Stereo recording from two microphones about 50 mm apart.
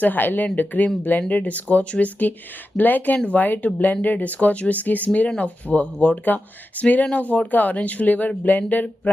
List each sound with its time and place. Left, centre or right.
0.0 s speech: left